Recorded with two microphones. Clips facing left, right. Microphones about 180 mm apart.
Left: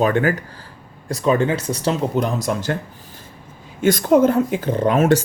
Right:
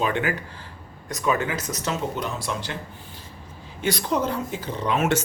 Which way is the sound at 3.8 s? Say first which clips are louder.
Left 10 dB; 45° left (ahead or behind).